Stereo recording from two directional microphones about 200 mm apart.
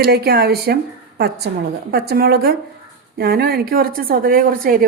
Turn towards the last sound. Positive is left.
turn(degrees=-45)  # may be behind; listen again after turning